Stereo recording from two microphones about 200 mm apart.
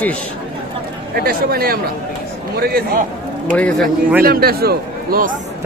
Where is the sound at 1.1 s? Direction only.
50° right (ahead or behind).